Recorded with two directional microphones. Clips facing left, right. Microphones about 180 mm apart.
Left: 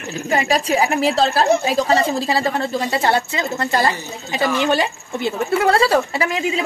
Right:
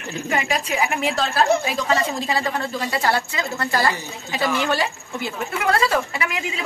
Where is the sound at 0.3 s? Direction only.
35° left (ahead or behind).